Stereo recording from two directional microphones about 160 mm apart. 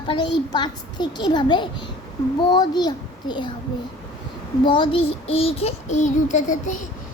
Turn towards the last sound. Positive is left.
turn(degrees=50)  # may be behind; listen again after turning